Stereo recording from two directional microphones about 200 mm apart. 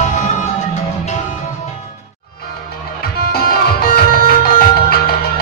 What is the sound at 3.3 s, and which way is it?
Music, 50° left (ahead or behind).